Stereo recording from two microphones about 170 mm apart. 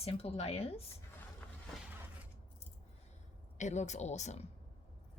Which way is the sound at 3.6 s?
45° left (ahead or behind).